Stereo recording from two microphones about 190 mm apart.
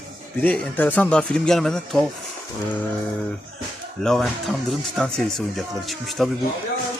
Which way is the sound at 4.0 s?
Centre (ahead or behind).